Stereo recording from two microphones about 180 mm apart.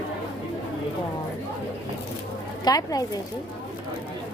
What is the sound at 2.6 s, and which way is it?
Speech, 20° left (ahead or behind).